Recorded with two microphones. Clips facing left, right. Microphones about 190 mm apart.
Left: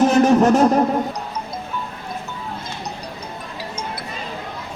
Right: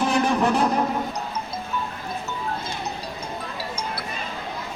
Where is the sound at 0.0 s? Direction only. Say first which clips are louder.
Left 7 dB; 45° left (ahead or behind).